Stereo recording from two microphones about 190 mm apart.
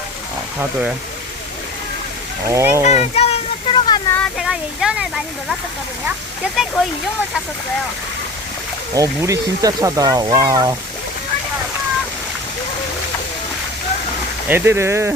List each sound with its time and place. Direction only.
0.6 s speech: 5° right (ahead or behind)
2.5 s speech: 15° right (ahead or behind)
2.8 s a child's voice: 35° left (ahead or behind)
4.1 s speech: 5° left (ahead or behind)
9.0 s speech: 15° right (ahead or behind)
14.4 s speech: 10° right (ahead or behind)